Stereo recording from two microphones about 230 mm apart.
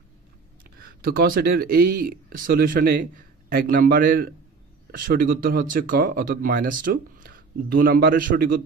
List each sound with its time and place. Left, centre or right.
0.7 s speech: right